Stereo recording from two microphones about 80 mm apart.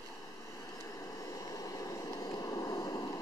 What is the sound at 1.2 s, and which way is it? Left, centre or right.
Vehicle, left.